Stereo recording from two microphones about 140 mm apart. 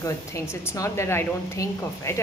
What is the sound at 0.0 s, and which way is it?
A woman's voice, 20° left (ahead or behind).